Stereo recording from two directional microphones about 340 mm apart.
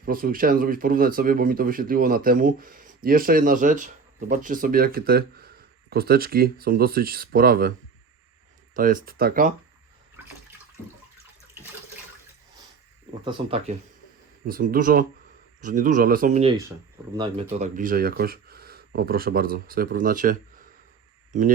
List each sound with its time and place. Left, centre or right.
0.0 s speech: right
8.7 s speech: right
13.2 s speech: centre